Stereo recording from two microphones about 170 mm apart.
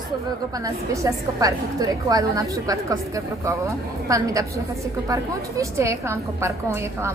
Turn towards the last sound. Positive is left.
turn(degrees=-15)  # may be behind; listen again after turning